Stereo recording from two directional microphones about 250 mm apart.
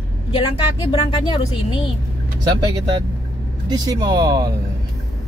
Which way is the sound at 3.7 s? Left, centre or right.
Centre.